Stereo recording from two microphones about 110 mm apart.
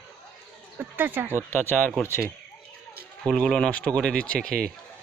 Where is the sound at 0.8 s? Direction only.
20° right (ahead or behind).